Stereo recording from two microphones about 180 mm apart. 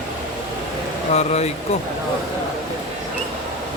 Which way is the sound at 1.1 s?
35° left (ahead or behind).